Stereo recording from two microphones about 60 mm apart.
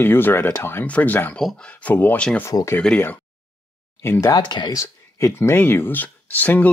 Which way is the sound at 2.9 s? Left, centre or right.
Centre.